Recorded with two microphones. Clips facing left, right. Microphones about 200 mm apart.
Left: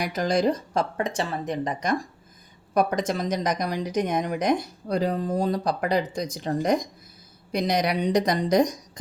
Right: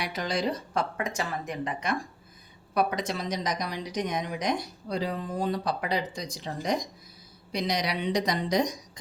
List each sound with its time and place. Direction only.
0.0 s speech: 45° left (ahead or behind)
3.1 s speech: 50° left (ahead or behind)